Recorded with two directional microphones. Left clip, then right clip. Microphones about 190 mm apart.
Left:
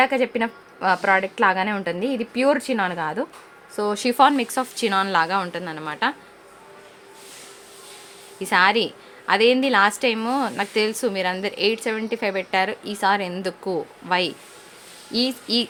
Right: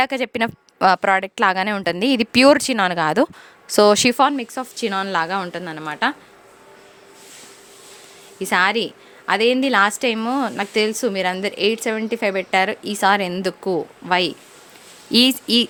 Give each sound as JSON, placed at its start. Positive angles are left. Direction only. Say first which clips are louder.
{"t": 0.0, "sound": "speech", "louder": "even", "side_deg": -60}
{"t": 4.2, "sound": "a woman's voice", "louder": "left 1 dB", "side_deg": -25}
{"t": 8.4, "sound": "a woman's voice", "louder": "even", "side_deg": -20}
{"t": 15.1, "sound": "speech", "louder": "right 7 dB", "side_deg": -45}